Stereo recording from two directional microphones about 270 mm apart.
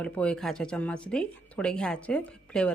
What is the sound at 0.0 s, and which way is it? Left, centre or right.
A woman's voice, centre.